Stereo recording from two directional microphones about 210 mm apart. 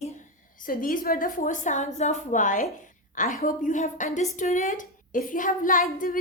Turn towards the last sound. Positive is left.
turn(degrees=40)  # may be behind; listen again after turning